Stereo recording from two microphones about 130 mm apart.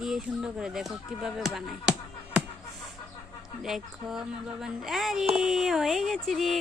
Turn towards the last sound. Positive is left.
turn(degrees=0)  # may be behind; listen again after turning